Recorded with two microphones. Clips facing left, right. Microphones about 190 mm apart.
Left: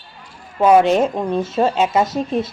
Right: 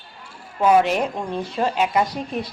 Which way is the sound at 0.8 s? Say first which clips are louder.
Left 5 dB; 25° left (ahead or behind).